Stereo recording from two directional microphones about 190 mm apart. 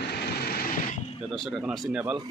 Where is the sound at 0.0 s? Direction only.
55° left (ahead or behind).